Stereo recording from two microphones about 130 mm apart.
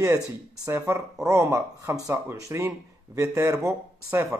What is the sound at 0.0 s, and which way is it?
Speech, 25° right (ahead or behind).